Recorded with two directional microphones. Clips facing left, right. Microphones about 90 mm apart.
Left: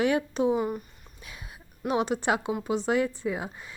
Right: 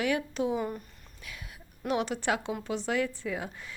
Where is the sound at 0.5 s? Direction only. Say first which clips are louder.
Left 4 dB; 5° left (ahead or behind).